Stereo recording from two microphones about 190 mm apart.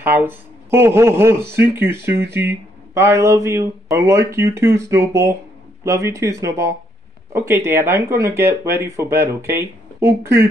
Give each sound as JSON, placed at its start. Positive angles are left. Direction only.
{"t": 0.0, "sound": "speech", "side_deg": -10}